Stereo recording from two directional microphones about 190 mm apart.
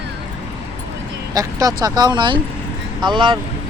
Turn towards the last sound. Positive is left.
turn(degrees=-25)  # may be behind; listen again after turning